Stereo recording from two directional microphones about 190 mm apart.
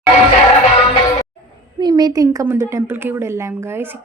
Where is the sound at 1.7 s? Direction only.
20° right (ahead or behind).